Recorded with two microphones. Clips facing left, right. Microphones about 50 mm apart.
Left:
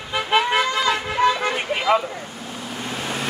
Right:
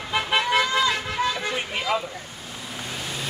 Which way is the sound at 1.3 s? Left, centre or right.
Left.